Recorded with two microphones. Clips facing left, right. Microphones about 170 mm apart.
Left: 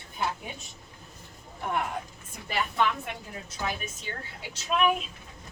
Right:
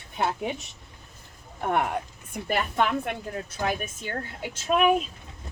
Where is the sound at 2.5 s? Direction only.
50° right (ahead or behind).